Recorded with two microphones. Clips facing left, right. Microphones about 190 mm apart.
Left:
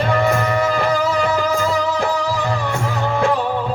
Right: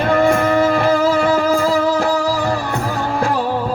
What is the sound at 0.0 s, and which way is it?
Music, 55° right (ahead or behind).